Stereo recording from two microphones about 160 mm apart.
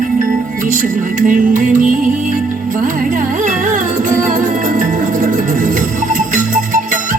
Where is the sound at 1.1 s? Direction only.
55° right (ahead or behind).